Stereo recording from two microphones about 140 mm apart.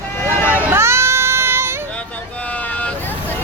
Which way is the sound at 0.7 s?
20° right (ahead or behind).